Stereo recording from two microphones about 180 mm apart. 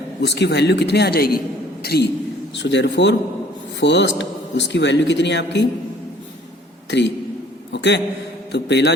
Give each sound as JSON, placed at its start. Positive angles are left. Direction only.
{"t": 0.2, "sound": "a man's voice", "side_deg": 70}
{"t": 2.6, "sound": "a man's voice", "side_deg": 75}
{"t": 6.9, "sound": "a man's voice", "side_deg": 80}